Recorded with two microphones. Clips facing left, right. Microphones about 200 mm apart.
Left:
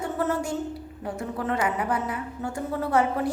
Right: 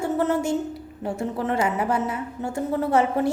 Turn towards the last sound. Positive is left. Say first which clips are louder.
# right 3 dB
turn(degrees=-25)  # may be behind; listen again after turning